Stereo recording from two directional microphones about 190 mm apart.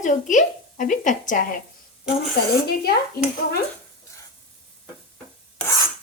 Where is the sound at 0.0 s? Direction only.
40° left (ahead or behind).